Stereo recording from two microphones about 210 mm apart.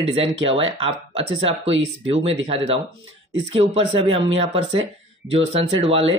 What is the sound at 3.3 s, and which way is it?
Speech, 25° right (ahead or behind).